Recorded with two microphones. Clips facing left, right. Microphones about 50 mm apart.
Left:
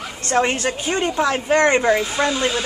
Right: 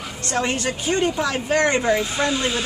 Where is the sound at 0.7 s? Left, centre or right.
Left.